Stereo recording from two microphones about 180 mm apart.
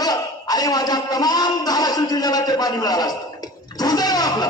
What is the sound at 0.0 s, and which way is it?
A man's voice, 20° left (ahead or behind).